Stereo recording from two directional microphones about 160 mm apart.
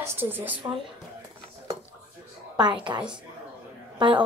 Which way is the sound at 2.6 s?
30° right (ahead or behind).